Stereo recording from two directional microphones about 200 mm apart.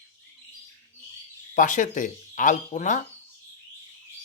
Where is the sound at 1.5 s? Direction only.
40° left (ahead or behind).